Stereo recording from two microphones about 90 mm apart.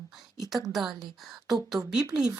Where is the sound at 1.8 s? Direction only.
40° right (ahead or behind).